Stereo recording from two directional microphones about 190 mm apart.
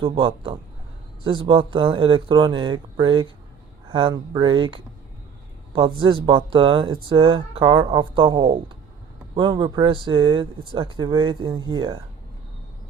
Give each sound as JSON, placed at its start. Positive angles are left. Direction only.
{"t": 0.0, "sound": "speech", "side_deg": -25}